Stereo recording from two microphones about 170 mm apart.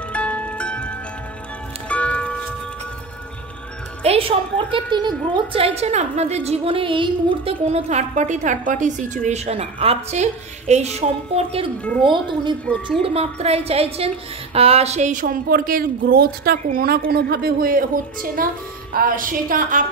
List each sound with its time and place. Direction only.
0.1 s zither: 10° left (ahead or behind)
1.9 s music: 10° left (ahead or behind)
4.0 s a woman's voice: 35° right (ahead or behind); by 19.8 s 55° right (ahead or behind)